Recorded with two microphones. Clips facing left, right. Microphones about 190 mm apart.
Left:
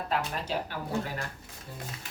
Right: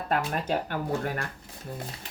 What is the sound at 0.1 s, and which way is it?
Speech, 55° right (ahead or behind).